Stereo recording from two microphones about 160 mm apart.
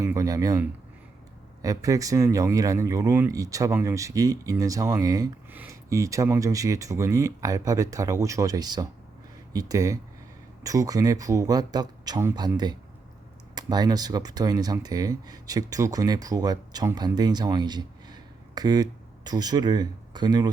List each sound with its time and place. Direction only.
0.0 s speech: 20° right (ahead or behind)